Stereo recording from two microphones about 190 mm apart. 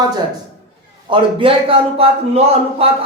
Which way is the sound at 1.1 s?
25° right (ahead or behind).